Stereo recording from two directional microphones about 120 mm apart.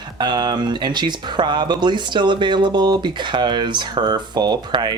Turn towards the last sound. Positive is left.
turn(degrees=-35)  # may be behind; listen again after turning